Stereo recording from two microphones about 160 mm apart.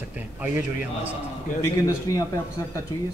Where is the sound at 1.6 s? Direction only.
20° left (ahead or behind).